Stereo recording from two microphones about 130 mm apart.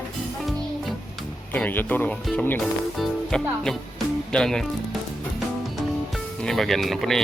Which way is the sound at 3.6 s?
5° left (ahead or behind).